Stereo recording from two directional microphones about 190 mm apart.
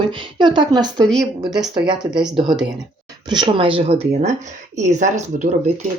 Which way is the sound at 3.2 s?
25° right (ahead or behind).